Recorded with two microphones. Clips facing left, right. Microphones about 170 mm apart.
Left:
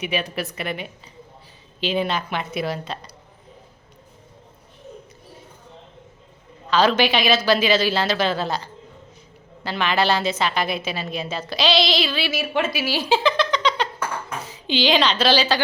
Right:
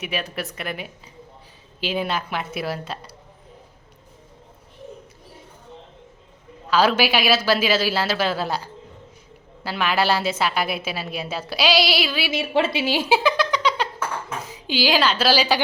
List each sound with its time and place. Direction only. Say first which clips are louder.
0.0 s a woman's voice: left 3 dB; centre (ahead or behind)
6.7 s a woman's voice: left 1 dB; 5° right (ahead or behind)
12.3 s a woman's voice: right 2 dB; 30° right (ahead or behind)
13.1 s a sound: left 2 dB; 10° right (ahead or behind)
14.7 s a woman's voice: left 1 dB; 5° right (ahead or behind)